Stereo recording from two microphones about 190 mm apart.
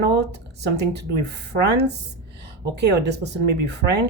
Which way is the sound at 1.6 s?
60° right (ahead or behind).